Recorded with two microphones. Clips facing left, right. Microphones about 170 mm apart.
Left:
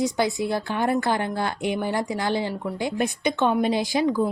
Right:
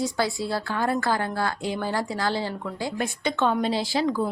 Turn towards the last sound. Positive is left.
turn(degrees=15)  # may be behind; listen again after turning